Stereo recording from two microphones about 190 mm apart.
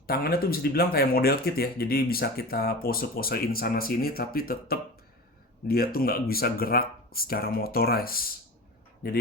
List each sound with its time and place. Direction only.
0.1 s speech: 50° left (ahead or behind)